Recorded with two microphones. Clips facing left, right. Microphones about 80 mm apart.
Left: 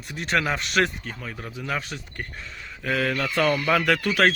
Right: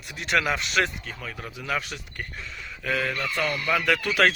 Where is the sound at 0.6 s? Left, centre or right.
Left.